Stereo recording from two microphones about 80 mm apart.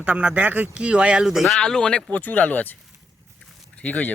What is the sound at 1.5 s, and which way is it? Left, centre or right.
Speech, centre.